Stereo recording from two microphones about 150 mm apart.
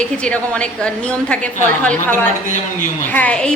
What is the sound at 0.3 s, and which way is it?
A woman's voice, 5° left (ahead or behind).